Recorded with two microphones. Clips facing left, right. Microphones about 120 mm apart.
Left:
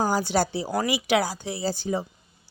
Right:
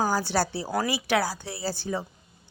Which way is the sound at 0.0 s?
15° left (ahead or behind).